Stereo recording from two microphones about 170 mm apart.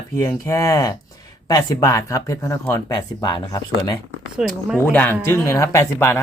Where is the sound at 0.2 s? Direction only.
20° left (ahead or behind).